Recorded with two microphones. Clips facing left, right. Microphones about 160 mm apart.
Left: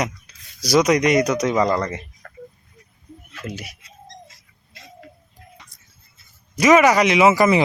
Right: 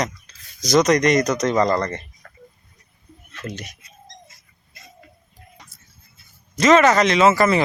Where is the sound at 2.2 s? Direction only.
55° left (ahead or behind).